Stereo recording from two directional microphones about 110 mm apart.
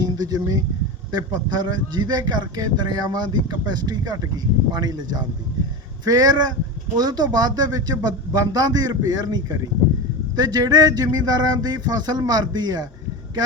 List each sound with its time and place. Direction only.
0.0 s a man's voice: 35° right (ahead or behind)